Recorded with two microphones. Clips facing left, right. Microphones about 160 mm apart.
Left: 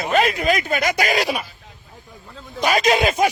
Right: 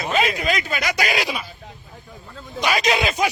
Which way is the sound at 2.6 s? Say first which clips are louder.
Left 3 dB; 45° left (ahead or behind).